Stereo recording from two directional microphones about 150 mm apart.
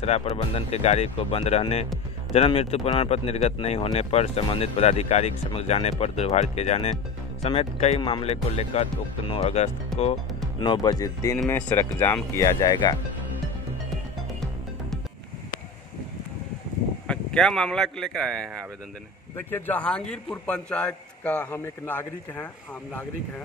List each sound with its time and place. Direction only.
0.0 s speech: 45° left (ahead or behind)
9.9 s music: 5° left (ahead or behind)
10.6 s speech: 30° left (ahead or behind)
17.1 s a man's voice: 5° left (ahead or behind)
19.3 s a man's voice: 15° left (ahead or behind)